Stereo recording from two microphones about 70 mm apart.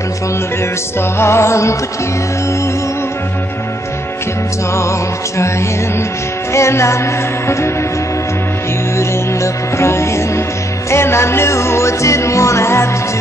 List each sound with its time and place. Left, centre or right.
1.1 s music: left
6.5 s music: left
8.9 s music: left